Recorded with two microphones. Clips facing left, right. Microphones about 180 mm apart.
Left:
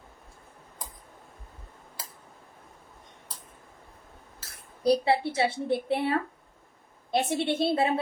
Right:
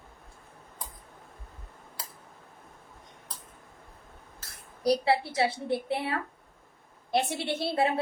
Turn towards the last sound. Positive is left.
turn(degrees=25)  # may be behind; listen again after turning